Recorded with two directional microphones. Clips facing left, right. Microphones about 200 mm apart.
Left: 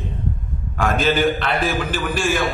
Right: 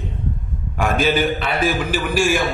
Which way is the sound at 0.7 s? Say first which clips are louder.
Right 1 dB; 10° right (ahead or behind).